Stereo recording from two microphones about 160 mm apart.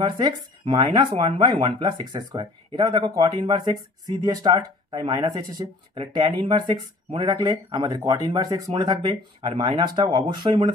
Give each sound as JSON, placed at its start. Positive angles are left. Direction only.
{"t": 0.0, "sound": "speech", "side_deg": -30}